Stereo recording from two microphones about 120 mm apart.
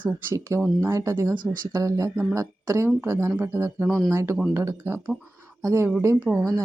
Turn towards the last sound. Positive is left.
turn(degrees=-25)  # may be behind; listen again after turning